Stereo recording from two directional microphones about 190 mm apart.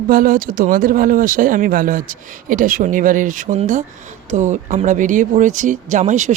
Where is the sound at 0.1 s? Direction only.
45° right (ahead or behind).